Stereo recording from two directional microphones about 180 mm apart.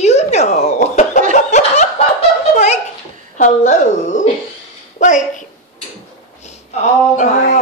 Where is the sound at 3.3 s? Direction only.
45° left (ahead or behind).